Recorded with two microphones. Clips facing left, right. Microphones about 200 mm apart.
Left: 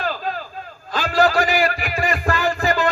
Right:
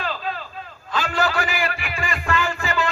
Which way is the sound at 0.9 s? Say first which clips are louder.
Left 5 dB; 35° left (ahead or behind).